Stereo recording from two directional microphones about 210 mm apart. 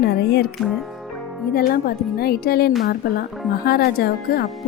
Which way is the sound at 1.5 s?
45° left (ahead or behind).